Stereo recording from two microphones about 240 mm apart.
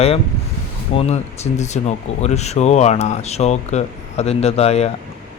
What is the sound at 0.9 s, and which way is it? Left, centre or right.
Speech, left.